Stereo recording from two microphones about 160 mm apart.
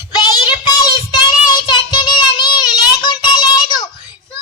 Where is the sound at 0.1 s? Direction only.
25° left (ahead or behind).